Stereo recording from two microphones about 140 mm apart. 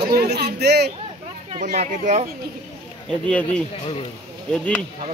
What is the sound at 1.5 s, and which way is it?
Speech, 55° right (ahead or behind).